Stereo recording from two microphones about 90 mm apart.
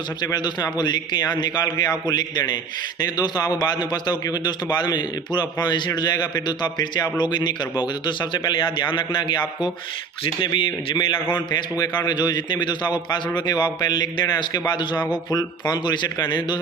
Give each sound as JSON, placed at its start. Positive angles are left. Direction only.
{"t": 0.2, "sound": "a man's voice", "side_deg": 50}
{"t": 11.1, "sound": "a man's voice", "side_deg": 25}
{"t": 11.8, "sound": "a man's voice", "side_deg": 45}